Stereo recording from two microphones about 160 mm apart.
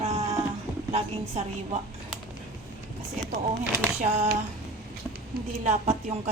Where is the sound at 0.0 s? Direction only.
45° right (ahead or behind).